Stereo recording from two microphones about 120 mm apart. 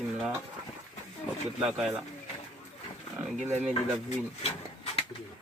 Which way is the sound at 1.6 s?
5° right (ahead or behind).